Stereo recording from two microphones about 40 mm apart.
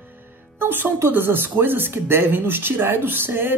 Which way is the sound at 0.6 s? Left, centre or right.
Right.